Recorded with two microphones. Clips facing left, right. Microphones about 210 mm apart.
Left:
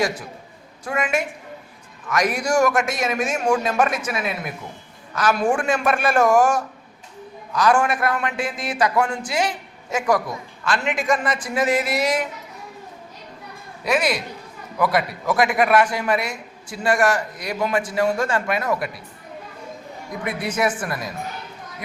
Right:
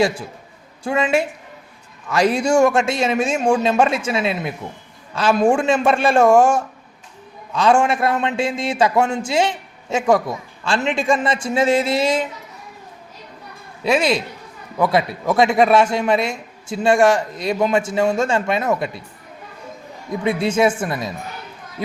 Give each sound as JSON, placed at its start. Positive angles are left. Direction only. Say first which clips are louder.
{"t": 0.9, "sound": "a man's voice", "louder": "right 5 dB", "side_deg": -30}
{"t": 13.8, "sound": "a man's voice", "louder": "right 4 dB", "side_deg": -25}
{"t": 20.2, "sound": "a man's voice", "louder": "right 6 dB", "side_deg": -25}